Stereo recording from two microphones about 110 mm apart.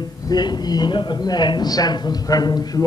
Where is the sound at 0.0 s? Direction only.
40° left (ahead or behind).